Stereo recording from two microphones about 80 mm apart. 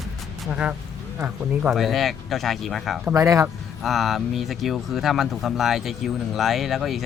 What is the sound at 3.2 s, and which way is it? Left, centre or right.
Speech, right.